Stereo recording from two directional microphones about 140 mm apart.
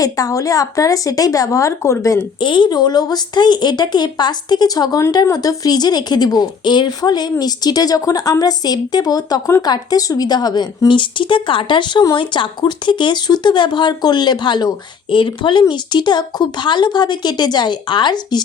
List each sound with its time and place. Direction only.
0.0 s speech: 25° left (ahead or behind)
2.4 s speech: 35° left (ahead or behind)